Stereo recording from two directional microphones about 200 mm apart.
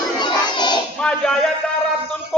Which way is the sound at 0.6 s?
20° left (ahead or behind).